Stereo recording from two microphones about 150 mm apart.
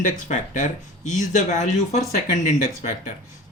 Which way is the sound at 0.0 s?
55° left (ahead or behind).